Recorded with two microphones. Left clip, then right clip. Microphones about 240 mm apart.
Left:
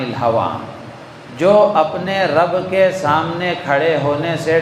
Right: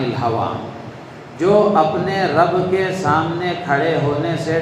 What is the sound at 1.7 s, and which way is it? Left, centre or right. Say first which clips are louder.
A man's voice: even; left.